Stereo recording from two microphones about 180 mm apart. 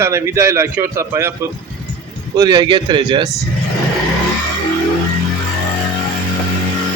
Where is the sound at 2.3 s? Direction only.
20° right (ahead or behind).